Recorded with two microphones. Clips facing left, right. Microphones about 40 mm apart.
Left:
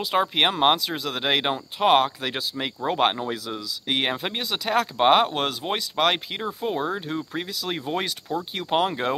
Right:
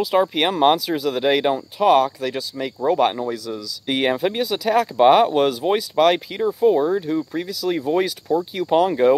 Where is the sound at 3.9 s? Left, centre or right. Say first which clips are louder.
Right 6 dB; centre.